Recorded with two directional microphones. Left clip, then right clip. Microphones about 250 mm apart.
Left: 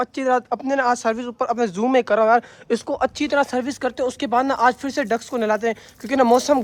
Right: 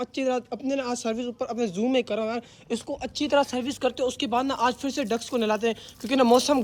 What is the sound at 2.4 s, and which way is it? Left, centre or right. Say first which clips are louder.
Speech: left 9 dB; left.